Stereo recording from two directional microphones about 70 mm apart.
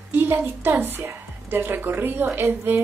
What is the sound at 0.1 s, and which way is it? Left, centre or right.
A woman's voice, right.